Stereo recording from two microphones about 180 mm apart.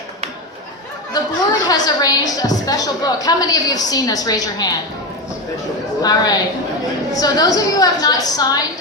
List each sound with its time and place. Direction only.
1.2 s chatter: 20° left (ahead or behind)
1.6 s a woman's voice: 20° left (ahead or behind)
6.0 s a woman's voice: 20° left (ahead or behind)